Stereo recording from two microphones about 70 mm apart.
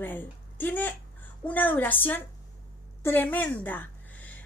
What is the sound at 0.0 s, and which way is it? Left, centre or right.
A woman's voice, left.